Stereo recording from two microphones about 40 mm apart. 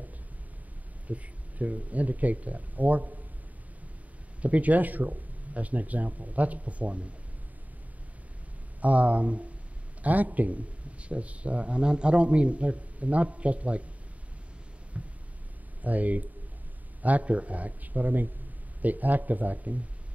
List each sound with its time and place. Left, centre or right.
1.0 s speech: right
4.4 s speech: right
8.8 s speech: right
15.0 s a sound: right
15.8 s speech: right